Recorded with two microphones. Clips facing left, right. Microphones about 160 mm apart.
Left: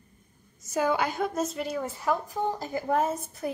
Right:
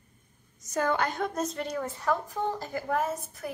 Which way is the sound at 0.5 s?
5° left (ahead or behind).